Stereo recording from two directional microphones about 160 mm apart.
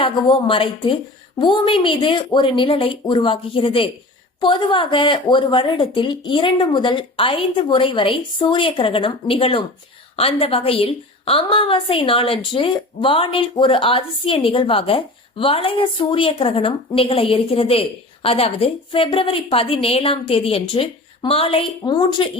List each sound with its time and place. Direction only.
0.0 s a woman's voice: 30° left (ahead or behind)